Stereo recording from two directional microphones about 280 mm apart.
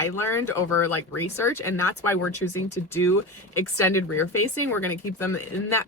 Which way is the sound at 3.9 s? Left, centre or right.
Centre.